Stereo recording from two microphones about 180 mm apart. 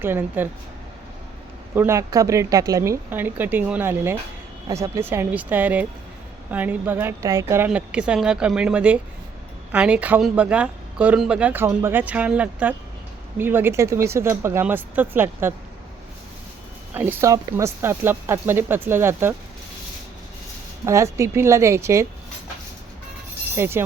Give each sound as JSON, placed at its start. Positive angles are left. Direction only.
{"t": 0.0, "sound": "speech", "side_deg": -10}
{"t": 1.7, "sound": "speech", "side_deg": -15}
{"t": 16.9, "sound": "speech", "side_deg": -10}
{"t": 20.8, "sound": "speech", "side_deg": -15}
{"t": 23.6, "sound": "speech", "side_deg": -15}